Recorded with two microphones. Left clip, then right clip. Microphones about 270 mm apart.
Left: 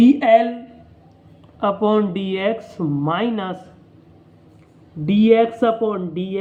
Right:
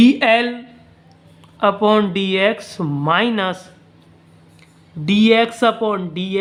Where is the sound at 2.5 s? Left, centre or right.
Right.